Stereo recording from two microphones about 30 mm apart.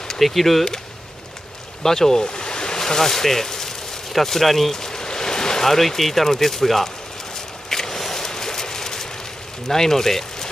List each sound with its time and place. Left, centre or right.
0.2 s speech: centre
1.8 s speech: centre
4.7 s a sound: centre
5.7 s speech: centre
7.7 s a sound: centre
9.7 s speech: centre